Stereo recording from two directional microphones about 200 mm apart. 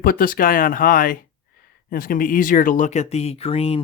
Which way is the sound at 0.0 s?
50° left (ahead or behind).